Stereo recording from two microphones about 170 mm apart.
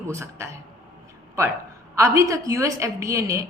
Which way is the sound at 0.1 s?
15° right (ahead or behind).